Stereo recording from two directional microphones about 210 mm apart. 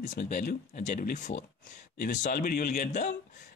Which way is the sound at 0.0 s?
40° left (ahead or behind).